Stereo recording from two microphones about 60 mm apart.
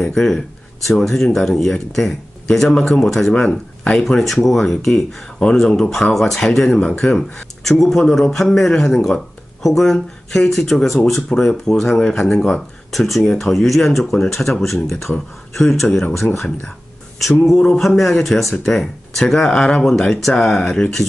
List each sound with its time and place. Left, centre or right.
0.0 s speech: centre
3.3 s speech: centre
4.5 s speech: centre
7.3 s a sound: centre
8.0 s speech: centre